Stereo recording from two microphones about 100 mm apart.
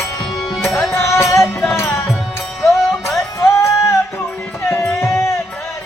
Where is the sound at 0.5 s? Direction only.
5° left (ahead or behind).